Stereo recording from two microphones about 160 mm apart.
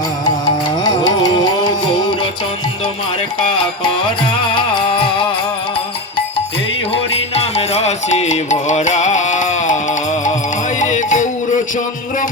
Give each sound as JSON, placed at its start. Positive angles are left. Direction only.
{"t": 0.9, "sound": "music", "side_deg": 25}
{"t": 4.5, "sound": "music", "side_deg": 30}
{"t": 6.9, "sound": "music", "side_deg": 40}